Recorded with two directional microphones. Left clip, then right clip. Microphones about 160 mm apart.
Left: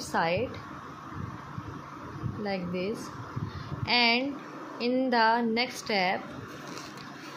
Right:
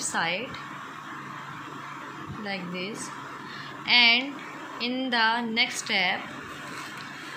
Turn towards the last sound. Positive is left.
turn(degrees=60)  # may be behind; listen again after turning